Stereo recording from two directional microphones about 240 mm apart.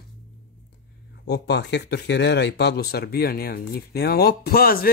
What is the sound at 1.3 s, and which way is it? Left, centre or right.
Speech, left.